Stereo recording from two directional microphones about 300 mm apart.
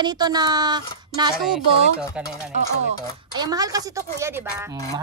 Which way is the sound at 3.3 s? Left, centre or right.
Centre.